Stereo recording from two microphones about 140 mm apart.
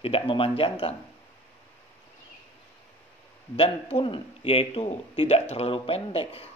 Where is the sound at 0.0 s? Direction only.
40° left (ahead or behind).